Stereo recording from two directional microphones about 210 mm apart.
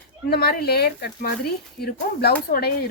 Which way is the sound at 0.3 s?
50° left (ahead or behind).